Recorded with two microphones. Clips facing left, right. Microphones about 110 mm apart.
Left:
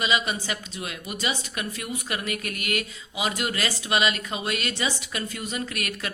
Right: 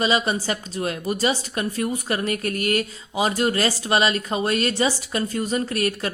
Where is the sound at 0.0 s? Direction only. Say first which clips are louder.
Right 5 dB; 35° right (ahead or behind).